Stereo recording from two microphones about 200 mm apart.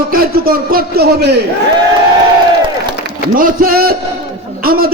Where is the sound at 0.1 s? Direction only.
50° right (ahead or behind).